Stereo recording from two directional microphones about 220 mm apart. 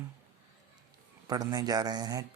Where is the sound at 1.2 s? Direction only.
15° right (ahead or behind).